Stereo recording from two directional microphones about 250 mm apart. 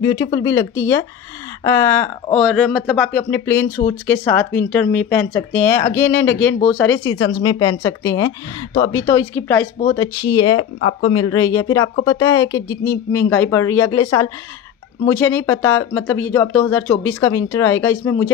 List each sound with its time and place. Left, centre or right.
0.0 s speech: centre
7.2 s speech: centre